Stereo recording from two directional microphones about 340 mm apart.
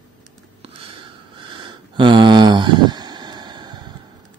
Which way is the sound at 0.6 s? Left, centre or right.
Centre.